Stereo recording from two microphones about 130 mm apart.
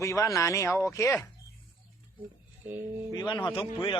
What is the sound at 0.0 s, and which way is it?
Speech, 25° left (ahead or behind).